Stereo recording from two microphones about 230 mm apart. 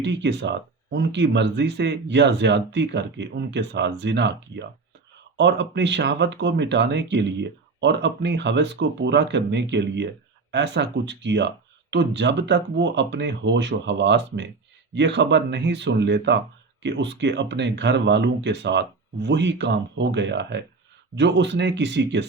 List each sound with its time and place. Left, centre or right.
0.0 s speech: right